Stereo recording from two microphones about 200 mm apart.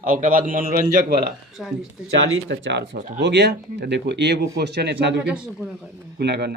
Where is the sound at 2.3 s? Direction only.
65° right (ahead or behind).